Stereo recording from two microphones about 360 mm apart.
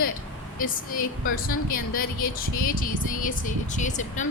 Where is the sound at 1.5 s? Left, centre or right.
Left.